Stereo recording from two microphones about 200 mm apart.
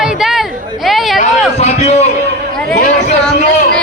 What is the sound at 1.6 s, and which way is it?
Speech, 30° left (ahead or behind).